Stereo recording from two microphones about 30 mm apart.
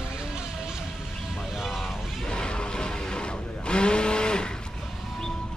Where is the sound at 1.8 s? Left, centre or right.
Centre.